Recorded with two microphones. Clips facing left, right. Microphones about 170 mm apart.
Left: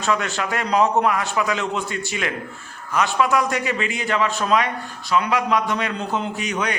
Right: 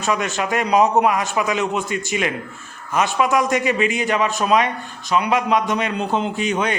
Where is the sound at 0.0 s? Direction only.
20° right (ahead or behind).